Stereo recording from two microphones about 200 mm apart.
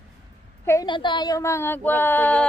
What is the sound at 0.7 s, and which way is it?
Speech, 20° left (ahead or behind).